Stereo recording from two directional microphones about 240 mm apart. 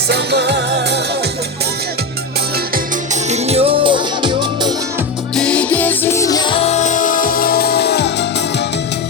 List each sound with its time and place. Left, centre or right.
0.1 s music: right
3.2 s music: right
5.3 s music: centre; by 8.6 s left